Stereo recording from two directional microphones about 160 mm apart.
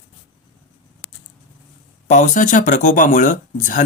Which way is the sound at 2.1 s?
50° left (ahead or behind).